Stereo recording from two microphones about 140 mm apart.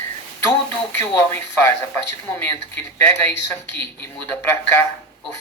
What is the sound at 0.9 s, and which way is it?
Speech, 15° left (ahead or behind).